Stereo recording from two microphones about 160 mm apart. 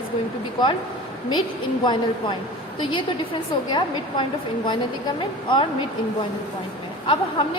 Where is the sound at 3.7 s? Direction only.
30° left (ahead or behind).